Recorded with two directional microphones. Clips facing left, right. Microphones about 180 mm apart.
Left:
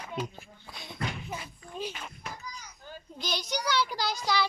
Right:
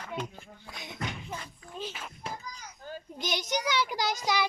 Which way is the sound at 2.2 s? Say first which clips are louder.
Right 4 dB; 30° right (ahead or behind).